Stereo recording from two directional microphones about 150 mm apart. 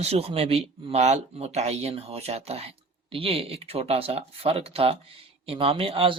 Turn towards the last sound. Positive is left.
turn(degrees=-40)  # may be behind; listen again after turning